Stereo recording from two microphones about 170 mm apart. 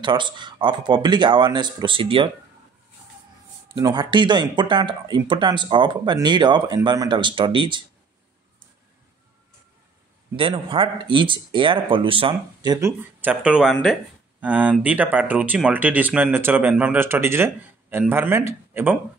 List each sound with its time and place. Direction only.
0.0 s speech: 25° right (ahead or behind)
3.7 s speech: 25° right (ahead or behind)
10.3 s speech: 30° right (ahead or behind)
13.2 s speech: 10° right (ahead or behind)